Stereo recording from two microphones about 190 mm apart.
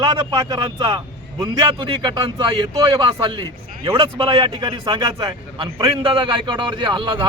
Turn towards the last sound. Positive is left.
turn(degrees=-25)  # may be behind; listen again after turning